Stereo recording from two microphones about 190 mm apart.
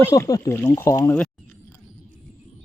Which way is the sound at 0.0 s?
15° left (ahead or behind).